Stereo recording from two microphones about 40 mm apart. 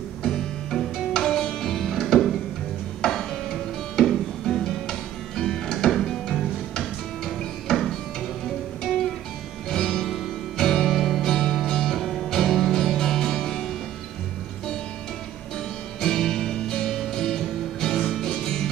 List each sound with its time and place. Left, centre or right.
0.2 s music: centre
9.7 s music: centre
16.0 s music: centre